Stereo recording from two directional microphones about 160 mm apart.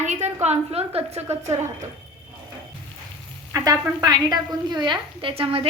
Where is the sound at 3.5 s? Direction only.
25° right (ahead or behind).